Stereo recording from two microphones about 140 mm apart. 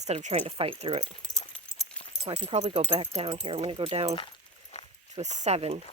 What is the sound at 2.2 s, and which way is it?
Speech, 40° right (ahead or behind).